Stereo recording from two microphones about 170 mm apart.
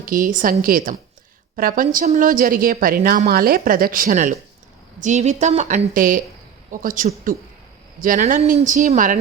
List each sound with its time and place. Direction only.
0.0 s a woman's voice: 55° right (ahead or behind)